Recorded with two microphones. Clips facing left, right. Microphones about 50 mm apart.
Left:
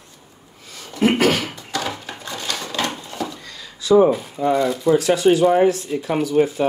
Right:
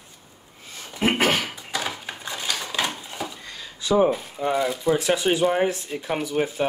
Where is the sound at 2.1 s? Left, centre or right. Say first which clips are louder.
Left 2 dB; centre.